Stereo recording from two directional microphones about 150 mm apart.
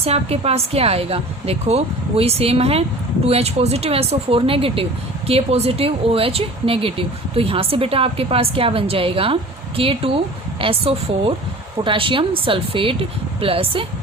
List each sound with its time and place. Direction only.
0.0 s a woman's voice: 40° right (ahead or behind)